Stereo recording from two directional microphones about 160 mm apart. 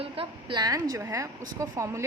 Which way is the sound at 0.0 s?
35° right (ahead or behind).